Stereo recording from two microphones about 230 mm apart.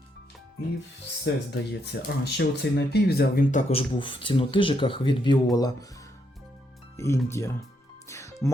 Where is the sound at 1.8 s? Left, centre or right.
Left.